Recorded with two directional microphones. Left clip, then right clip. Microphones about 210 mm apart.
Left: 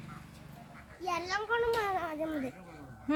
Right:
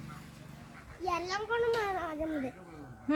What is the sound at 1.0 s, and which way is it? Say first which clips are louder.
Speech: even; 15° left (ahead or behind).